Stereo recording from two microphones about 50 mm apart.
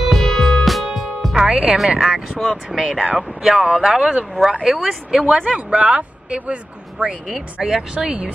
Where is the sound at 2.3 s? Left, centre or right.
Centre.